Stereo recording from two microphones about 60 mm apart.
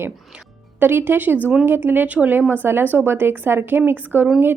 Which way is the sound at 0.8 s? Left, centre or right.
Right.